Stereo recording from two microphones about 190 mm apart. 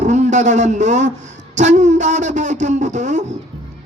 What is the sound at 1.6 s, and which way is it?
A man's voice, 40° right (ahead or behind).